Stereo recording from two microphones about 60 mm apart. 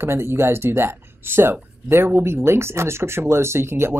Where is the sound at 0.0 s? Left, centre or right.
Right.